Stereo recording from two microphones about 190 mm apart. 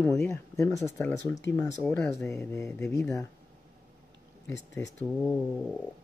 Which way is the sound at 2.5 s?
15° left (ahead or behind).